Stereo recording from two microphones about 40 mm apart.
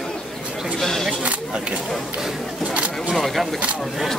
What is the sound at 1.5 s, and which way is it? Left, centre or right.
Speech, right.